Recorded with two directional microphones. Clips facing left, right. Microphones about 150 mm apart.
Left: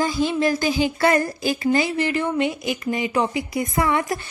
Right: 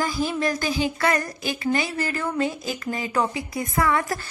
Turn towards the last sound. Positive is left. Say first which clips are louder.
# left 1 dB
turn(degrees=20)  # may be behind; listen again after turning